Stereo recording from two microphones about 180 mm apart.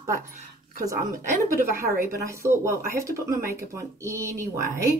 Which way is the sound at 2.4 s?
15° right (ahead or behind).